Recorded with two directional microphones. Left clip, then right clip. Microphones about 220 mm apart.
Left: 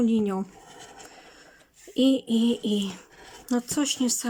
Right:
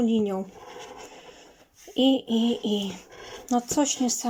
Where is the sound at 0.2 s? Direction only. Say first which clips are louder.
Right 1 dB; 20° left (ahead or behind).